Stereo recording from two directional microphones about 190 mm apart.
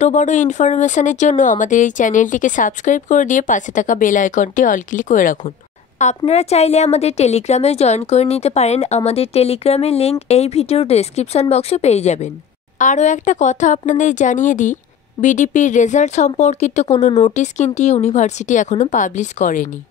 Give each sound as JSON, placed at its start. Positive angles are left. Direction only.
{"t": 0.0, "sound": "a woman's voice", "side_deg": 40}